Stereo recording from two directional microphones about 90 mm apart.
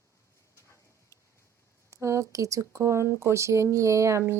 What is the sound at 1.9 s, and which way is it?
Speech, 35° right (ahead or behind).